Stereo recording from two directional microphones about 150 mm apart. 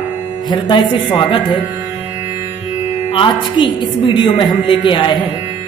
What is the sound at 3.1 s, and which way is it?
A woman's voice, 35° left (ahead or behind).